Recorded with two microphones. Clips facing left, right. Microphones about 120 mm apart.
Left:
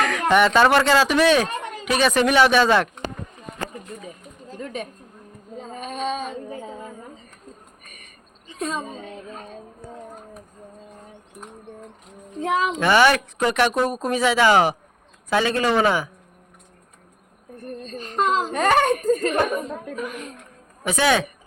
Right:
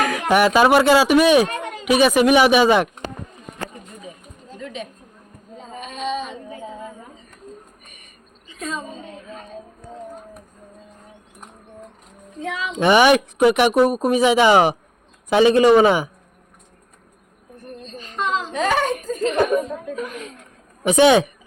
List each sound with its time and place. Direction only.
0.0 s speech: 10° right (ahead or behind)
4.6 s a sound: 50° left (ahead or behind)
8.5 s a woman's voice: 35° left (ahead or behind)
12.4 s a child's voice: 40° left (ahead or behind)
12.8 s speech: 15° right (ahead or behind)
17.6 s baby cry: 50° left (ahead or behind)
20.8 s speech: 20° right (ahead or behind)